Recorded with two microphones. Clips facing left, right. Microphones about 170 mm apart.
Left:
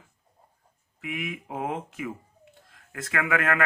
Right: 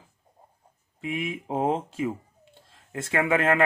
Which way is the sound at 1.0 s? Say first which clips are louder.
Right 4 dB; 25° right (ahead or behind).